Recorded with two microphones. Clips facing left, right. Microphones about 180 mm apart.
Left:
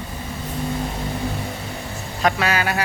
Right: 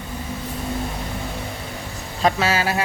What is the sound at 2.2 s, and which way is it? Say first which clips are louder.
Speech: right 1 dB; 25° right (ahead or behind).